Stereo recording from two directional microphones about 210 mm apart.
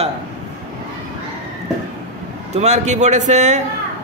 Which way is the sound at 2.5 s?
30° right (ahead or behind).